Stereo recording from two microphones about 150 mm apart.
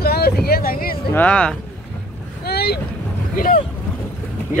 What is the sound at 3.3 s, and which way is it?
Speech, 70° left (ahead or behind).